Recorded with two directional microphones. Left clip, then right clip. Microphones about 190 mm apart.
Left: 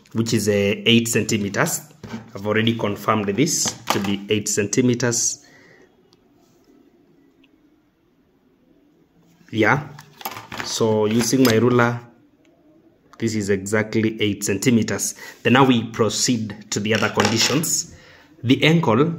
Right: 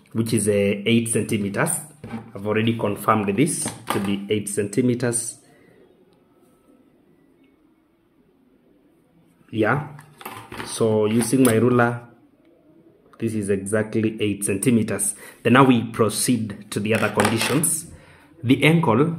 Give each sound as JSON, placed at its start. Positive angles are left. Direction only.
{"t": 0.1, "sound": "speech", "side_deg": 15}
{"t": 3.2, "sound": "speech", "side_deg": 5}
{"t": 4.1, "sound": "speech", "side_deg": 15}
{"t": 9.5, "sound": "speech", "side_deg": 20}
{"t": 10.7, "sound": "speech", "side_deg": 10}
{"t": 13.1, "sound": "speech", "side_deg": 15}